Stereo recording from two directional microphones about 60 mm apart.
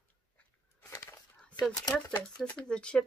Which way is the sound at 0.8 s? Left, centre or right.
Left.